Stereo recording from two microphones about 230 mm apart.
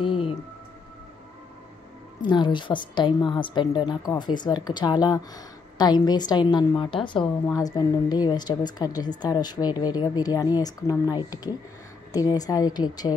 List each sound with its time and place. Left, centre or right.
0.0 s music: left
2.2 s a woman's voice: centre